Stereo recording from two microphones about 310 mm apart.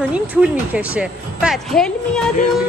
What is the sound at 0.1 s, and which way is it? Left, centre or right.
Speech, centre.